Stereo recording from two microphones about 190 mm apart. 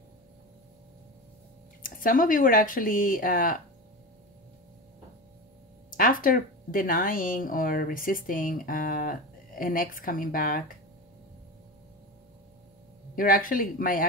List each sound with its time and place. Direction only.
1.8 s speech: 45° left (ahead or behind)
5.9 s speech: 45° left (ahead or behind)
13.1 s speech: 45° left (ahead or behind)